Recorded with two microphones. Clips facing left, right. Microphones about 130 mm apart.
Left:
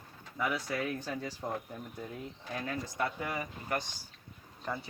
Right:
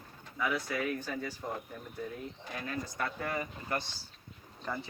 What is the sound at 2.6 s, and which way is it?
Speech, 20° left (ahead or behind).